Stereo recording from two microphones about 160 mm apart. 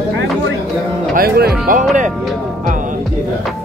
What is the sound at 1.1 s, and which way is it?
Speech, 75° right (ahead or behind).